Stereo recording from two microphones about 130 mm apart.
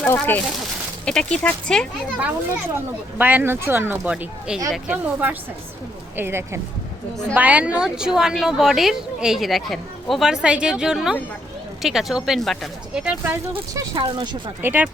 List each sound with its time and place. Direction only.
0.0 s speech: 15° left (ahead or behind)
3.2 s a woman's voice: 15° right (ahead or behind)
13.7 s speech: 40° right (ahead or behind)
14.6 s speech: 15° right (ahead or behind)